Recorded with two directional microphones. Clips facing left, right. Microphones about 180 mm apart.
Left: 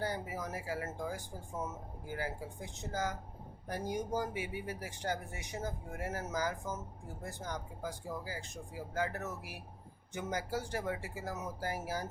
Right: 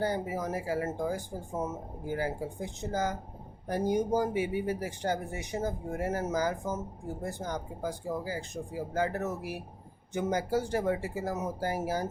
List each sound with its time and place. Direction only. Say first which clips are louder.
0.0 s speech: right 7 dB; 25° right (ahead or behind)
11.6 s speech: right 6 dB; 25° right (ahead or behind)